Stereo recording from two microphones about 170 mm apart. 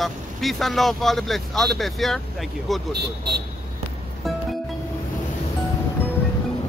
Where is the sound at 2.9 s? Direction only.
75° right (ahead or behind).